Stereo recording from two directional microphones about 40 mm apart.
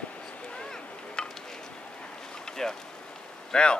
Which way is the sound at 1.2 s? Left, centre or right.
Left.